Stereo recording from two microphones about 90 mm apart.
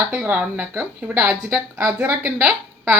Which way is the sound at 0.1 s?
15° right (ahead or behind).